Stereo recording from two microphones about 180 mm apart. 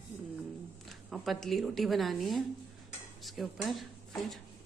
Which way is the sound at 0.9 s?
Centre (ahead or behind).